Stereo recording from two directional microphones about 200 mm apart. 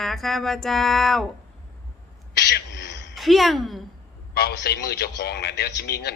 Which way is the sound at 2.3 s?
55° left (ahead or behind).